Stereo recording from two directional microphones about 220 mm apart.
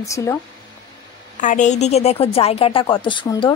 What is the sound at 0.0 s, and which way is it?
Speech, 15° left (ahead or behind).